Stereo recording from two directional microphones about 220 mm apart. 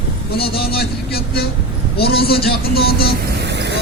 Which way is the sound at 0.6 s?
45° left (ahead or behind).